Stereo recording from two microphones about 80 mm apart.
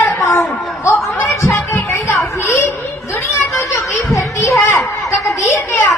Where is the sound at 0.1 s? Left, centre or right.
Left.